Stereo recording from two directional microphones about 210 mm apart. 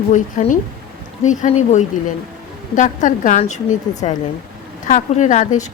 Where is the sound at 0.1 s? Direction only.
35° left (ahead or behind).